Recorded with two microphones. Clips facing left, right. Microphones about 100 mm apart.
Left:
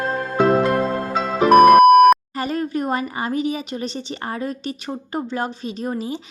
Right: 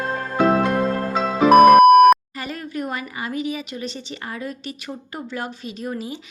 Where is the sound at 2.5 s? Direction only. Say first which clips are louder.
Left 5 dB; 35° left (ahead or behind).